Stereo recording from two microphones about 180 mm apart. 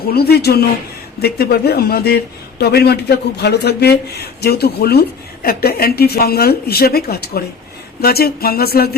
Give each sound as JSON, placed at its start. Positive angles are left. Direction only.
{"t": 0.1, "sound": "speech", "side_deg": 60}